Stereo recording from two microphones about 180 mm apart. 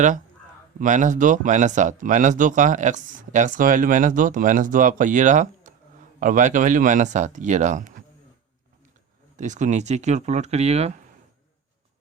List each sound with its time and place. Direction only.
0.8 s speech: 45° right (ahead or behind)
9.4 s speech: 40° right (ahead or behind)